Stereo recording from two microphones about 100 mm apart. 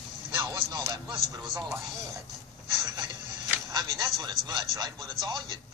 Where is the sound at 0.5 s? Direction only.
40° right (ahead or behind).